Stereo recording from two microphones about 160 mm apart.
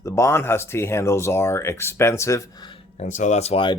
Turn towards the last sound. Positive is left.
turn(degrees=35)  # may be behind; listen again after turning